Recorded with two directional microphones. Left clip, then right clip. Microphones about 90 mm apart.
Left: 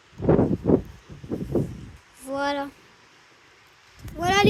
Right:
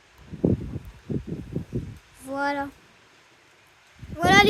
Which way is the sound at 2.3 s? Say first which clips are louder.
Even; 40° right (ahead or behind).